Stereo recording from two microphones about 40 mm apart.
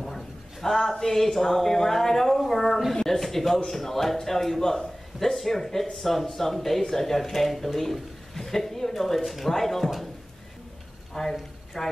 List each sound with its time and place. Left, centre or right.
0.0 s a sound: centre
1.0 s a man's voice: centre
11.1 s a man's voice: centre